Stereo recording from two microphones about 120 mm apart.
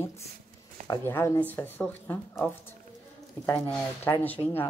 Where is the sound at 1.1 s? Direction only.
20° left (ahead or behind).